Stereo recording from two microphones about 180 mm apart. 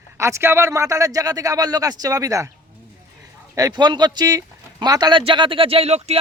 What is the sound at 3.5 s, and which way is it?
Speech, 20° right (ahead or behind).